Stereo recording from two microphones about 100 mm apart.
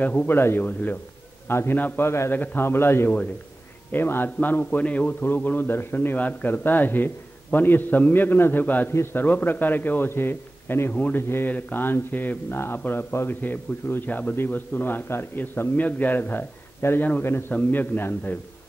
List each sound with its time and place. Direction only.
0.0 s a man's voice: 15° left (ahead or behind)